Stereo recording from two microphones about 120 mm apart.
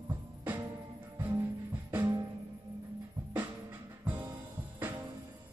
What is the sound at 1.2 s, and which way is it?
Music, 15° right (ahead or behind).